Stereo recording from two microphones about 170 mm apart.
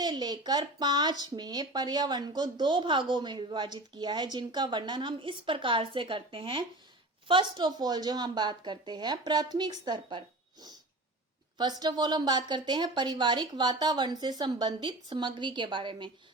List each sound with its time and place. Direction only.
0.0 s speech: 25° right (ahead or behind)